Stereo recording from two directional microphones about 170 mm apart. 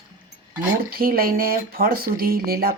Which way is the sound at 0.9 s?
60° right (ahead or behind).